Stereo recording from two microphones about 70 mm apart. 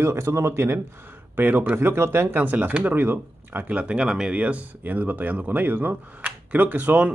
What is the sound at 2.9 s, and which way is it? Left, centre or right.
Speech, right.